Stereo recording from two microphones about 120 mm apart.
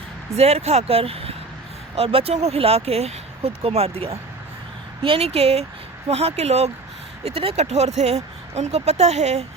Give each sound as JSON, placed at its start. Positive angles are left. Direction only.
{"t": 0.3, "sound": "speech", "side_deg": -60}